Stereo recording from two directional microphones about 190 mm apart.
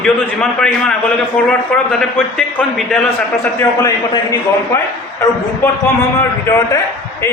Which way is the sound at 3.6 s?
15° left (ahead or behind).